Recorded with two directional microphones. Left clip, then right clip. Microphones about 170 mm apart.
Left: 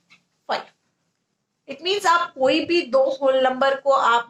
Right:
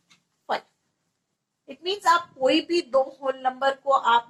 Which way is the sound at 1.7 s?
45° left (ahead or behind).